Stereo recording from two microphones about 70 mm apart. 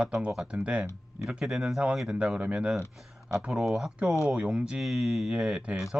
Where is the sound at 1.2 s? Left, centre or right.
Centre.